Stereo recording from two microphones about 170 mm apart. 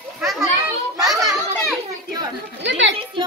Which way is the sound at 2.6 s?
90° right.